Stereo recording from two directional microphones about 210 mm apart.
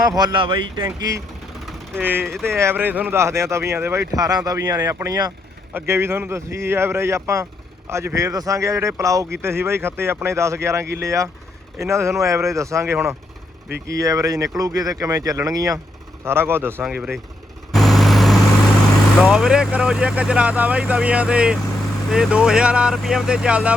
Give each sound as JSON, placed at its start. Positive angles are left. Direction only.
{"t": 0.2, "sound": "speech", "side_deg": -20}
{"t": 17.7, "sound": "vehicle", "side_deg": 0}
{"t": 19.2, "sound": "speech", "side_deg": 0}